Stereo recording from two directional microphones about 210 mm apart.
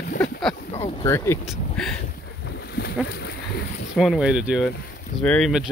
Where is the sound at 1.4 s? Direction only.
Centre (ahead or behind).